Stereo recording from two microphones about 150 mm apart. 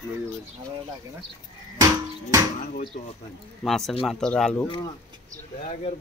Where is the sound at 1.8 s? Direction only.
20° right (ahead or behind).